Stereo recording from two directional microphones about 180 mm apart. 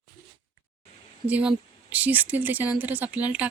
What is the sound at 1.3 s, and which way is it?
Speech, 10° right (ahead or behind).